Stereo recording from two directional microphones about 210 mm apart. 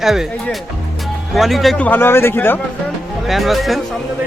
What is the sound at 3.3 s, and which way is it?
Speech, centre (ahead or behind).